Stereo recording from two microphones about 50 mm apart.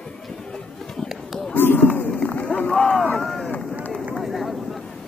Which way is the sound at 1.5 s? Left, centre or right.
Left.